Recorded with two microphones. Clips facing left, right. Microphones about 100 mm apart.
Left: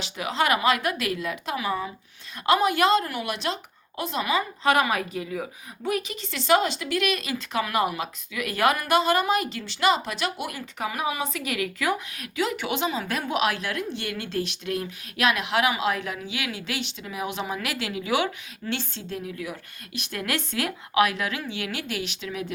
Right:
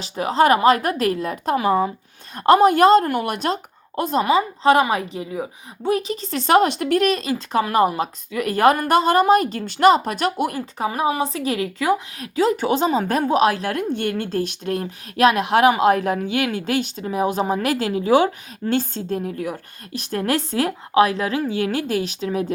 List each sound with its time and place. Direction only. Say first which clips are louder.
0.0 s a woman's voice: right 8 dB; 35° right (ahead or behind)